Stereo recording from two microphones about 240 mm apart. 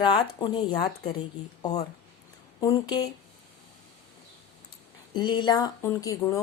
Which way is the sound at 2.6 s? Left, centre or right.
Centre.